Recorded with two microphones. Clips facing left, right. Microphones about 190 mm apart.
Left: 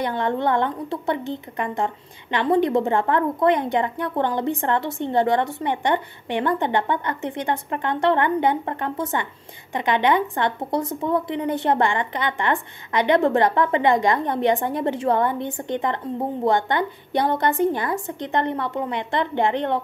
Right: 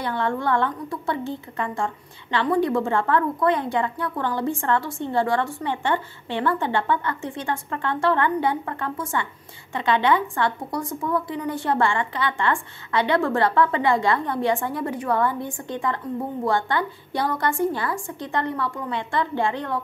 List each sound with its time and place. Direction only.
0.0 s a woman's voice: 20° left (ahead or behind)